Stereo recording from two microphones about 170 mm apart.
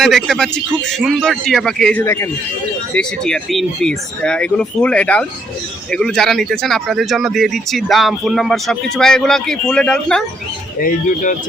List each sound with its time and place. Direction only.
0.0 s speech: centre (ahead or behind)
10.8 s speech: 50° left (ahead or behind)